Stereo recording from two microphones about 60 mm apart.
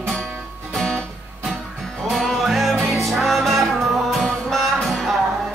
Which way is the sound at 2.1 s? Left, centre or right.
Centre.